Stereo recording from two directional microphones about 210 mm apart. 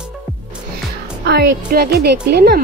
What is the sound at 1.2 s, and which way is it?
Speech, 50° right (ahead or behind).